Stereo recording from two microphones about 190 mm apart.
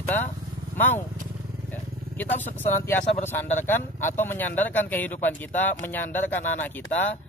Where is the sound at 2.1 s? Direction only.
10° left (ahead or behind).